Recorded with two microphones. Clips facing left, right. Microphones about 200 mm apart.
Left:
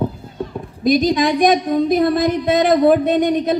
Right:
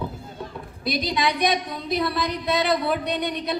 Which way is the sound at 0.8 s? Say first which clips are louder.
Left 10 dB; 45° left (ahead or behind).